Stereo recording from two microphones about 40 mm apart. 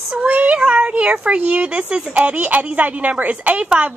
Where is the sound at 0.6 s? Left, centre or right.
Right.